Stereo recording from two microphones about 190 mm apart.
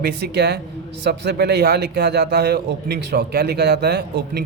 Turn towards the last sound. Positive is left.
turn(degrees=-60)  # may be behind; listen again after turning